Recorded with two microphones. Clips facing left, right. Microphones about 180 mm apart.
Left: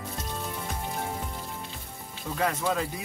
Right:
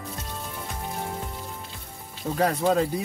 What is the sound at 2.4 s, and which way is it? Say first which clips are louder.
Speech: right 6 dB; 35° right (ahead or behind).